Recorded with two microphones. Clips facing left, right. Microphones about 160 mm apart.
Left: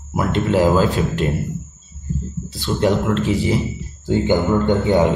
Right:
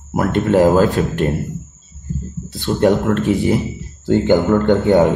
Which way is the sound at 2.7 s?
50° right (ahead or behind).